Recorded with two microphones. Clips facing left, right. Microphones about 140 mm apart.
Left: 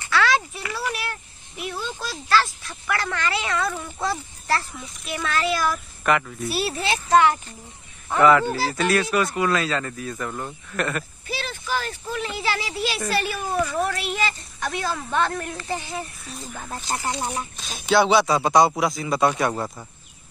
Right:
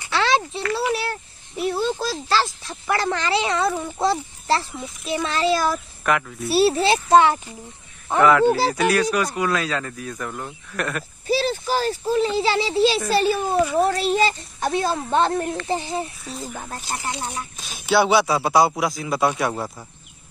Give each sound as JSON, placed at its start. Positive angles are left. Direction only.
{"t": 0.1, "sound": "a sound", "side_deg": -25}
{"t": 2.7, "sound": "a child's voice", "side_deg": -30}
{"t": 6.0, "sound": "speech", "side_deg": 0}
{"t": 6.5, "sound": "a child's voice", "side_deg": -30}
{"t": 8.2, "sound": "speech", "side_deg": 0}
{"t": 11.2, "sound": "a child's voice", "side_deg": -35}
{"t": 16.9, "sound": "speech", "side_deg": 20}
{"t": 17.8, "sound": "speech", "side_deg": -10}